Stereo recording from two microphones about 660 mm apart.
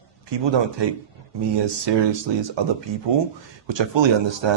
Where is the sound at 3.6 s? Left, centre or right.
Right.